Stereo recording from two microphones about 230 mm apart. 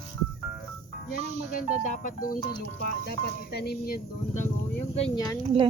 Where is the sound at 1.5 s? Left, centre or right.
Left.